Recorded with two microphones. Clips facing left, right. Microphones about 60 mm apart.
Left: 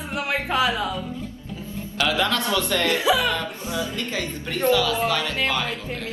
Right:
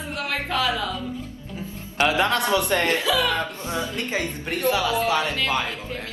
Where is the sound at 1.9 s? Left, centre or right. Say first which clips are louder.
Right 2 dB; right.